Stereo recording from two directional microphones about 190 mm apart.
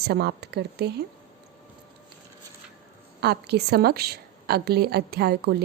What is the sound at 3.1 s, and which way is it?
A woman's voice, 60° right (ahead or behind).